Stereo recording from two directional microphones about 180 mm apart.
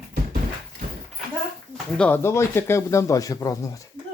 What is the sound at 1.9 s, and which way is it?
A man's voice, 10° left (ahead or behind).